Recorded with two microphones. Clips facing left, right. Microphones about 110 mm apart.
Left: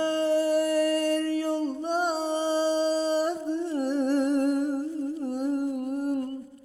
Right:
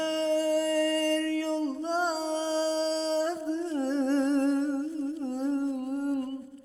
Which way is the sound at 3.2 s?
15° left (ahead or behind).